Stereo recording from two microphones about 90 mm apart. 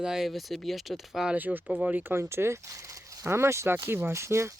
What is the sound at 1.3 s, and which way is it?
Speech, 20° right (ahead or behind).